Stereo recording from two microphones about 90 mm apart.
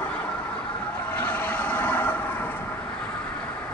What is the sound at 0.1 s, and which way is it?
Vehicle, 15° left (ahead or behind).